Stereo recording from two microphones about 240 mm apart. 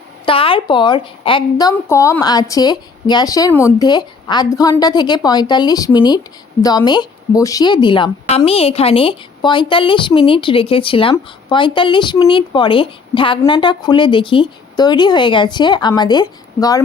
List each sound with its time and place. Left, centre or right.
0.3 s a woman's voice: left